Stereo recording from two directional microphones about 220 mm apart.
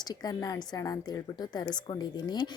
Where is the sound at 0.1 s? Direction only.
20° left (ahead or behind).